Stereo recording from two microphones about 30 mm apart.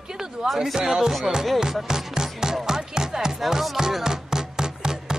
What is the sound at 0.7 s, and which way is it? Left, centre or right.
Music, centre.